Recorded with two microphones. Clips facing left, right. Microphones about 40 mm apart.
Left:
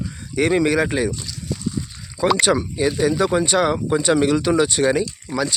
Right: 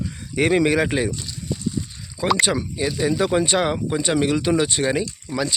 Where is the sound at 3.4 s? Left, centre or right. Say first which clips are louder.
Left 2 dB; right.